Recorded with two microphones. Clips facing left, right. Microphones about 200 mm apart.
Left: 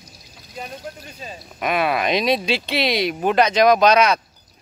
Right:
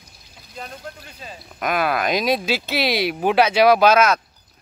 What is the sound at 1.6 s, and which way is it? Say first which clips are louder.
Speech: left 1 dB; centre (ahead or behind).